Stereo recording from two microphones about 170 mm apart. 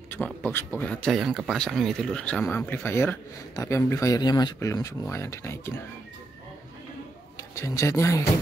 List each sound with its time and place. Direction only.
0.1 s speech: 10° left (ahead or behind)
7.3 s speech: 20° left (ahead or behind)